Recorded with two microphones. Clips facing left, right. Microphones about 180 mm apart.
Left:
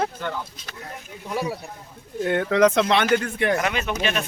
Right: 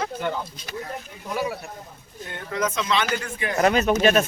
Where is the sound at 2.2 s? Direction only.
75° left (ahead or behind).